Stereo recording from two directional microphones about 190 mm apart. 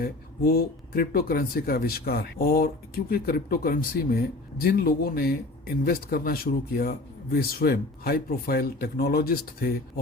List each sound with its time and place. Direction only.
0.0 s speech: 50° left (ahead or behind)